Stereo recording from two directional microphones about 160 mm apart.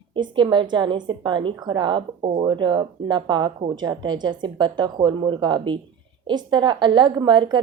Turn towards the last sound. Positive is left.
turn(degrees=-30)  # may be behind; listen again after turning